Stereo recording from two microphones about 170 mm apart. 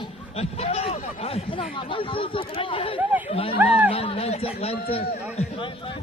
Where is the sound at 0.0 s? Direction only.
35° left (ahead or behind).